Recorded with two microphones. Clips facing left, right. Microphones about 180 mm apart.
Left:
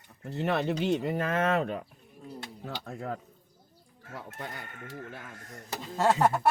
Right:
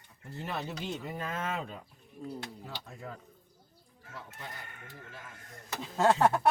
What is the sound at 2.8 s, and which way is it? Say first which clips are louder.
Speech: left 8 dB; 65° left (ahead or behind).